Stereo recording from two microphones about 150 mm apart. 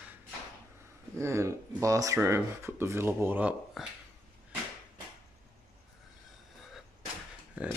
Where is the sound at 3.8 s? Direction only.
Centre (ahead or behind).